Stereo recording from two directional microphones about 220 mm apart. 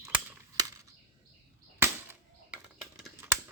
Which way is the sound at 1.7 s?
10° right (ahead or behind).